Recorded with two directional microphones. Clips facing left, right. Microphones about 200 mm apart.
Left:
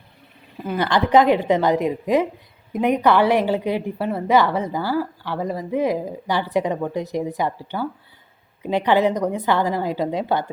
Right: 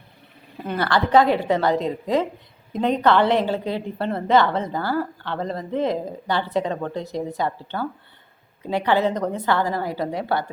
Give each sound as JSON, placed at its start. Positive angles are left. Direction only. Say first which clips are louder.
{"t": 0.8, "sound": "a woman's voice", "louder": "left 1 dB", "side_deg": 15}